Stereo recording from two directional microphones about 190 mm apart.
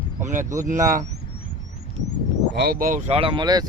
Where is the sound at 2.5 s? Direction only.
55° right (ahead or behind); by 3.6 s 20° right (ahead or behind).